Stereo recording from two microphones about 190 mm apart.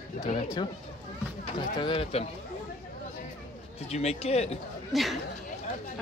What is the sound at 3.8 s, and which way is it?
Speech, 35° left (ahead or behind).